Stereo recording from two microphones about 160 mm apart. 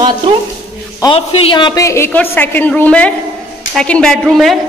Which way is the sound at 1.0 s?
35° left (ahead or behind).